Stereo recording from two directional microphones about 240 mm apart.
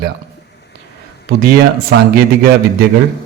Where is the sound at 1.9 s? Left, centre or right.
Right.